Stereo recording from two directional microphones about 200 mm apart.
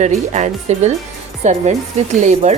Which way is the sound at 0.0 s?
35° right (ahead or behind).